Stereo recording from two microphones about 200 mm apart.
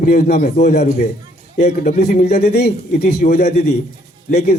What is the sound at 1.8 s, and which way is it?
A man's voice, 35° left (ahead or behind).